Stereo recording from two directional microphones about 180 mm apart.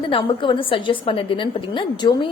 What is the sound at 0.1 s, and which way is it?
A woman's voice, 30° left (ahead or behind).